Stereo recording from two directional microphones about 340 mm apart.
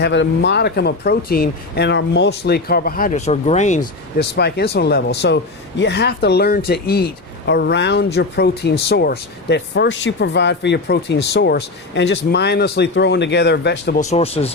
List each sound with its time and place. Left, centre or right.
0.0 s speech: left